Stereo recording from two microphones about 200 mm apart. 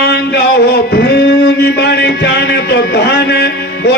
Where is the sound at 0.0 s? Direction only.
55° left (ahead or behind).